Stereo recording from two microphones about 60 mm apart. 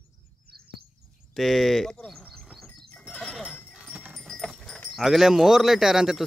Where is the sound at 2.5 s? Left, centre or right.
Centre.